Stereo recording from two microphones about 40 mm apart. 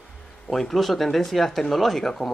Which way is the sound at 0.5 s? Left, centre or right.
Centre.